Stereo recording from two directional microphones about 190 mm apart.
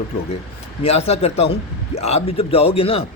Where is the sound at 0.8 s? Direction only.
35° left (ahead or behind).